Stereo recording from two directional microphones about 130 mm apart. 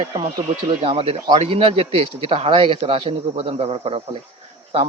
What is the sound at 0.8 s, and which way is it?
Speech, 45° right (ahead or behind).